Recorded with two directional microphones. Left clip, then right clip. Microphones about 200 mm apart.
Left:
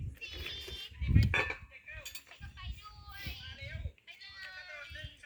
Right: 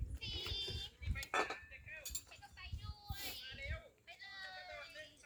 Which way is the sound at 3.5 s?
45° left (ahead or behind).